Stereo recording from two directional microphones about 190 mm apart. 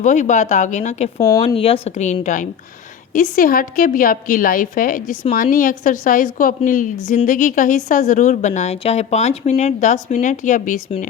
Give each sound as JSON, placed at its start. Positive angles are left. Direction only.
{"t": 0.0, "sound": "a woman's voice", "side_deg": 40}
{"t": 1.2, "sound": "a woman's voice", "side_deg": 20}